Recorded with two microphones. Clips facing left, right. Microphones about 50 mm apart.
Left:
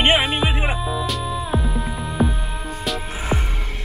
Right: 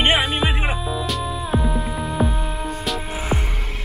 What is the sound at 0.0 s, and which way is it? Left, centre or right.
Music, centre.